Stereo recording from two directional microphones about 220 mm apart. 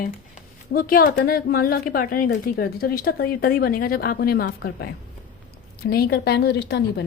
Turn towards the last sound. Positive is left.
turn(degrees=50)  # may be behind; listen again after turning